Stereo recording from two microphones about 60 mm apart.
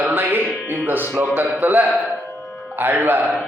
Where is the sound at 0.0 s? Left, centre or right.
Right.